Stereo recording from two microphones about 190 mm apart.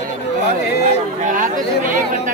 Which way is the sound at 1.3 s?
45° right (ahead or behind).